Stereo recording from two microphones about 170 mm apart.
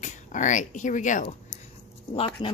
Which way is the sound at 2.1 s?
35° left (ahead or behind).